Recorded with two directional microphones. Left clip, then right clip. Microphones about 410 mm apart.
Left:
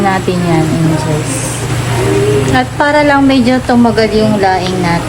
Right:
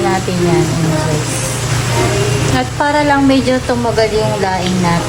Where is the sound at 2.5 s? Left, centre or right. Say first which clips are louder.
Left 2 dB; centre.